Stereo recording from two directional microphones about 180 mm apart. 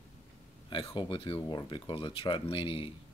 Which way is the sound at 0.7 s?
25° left (ahead or behind).